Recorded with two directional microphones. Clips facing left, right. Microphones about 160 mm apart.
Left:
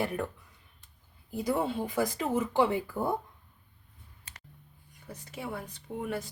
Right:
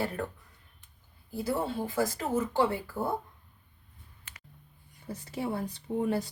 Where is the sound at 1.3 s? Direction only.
15° left (ahead or behind).